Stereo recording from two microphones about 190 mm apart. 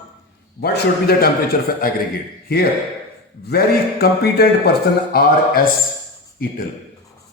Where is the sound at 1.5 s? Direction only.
45° left (ahead or behind).